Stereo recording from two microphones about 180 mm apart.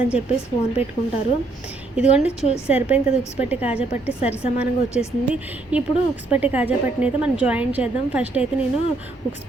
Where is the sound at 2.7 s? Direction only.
5° right (ahead or behind).